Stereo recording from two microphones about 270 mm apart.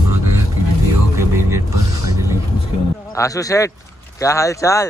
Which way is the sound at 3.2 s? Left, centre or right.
Centre.